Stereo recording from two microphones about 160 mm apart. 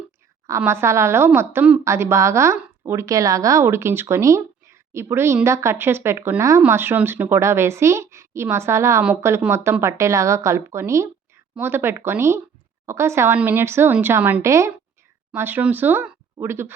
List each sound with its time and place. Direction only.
0.4 s speech: 15° right (ahead or behind)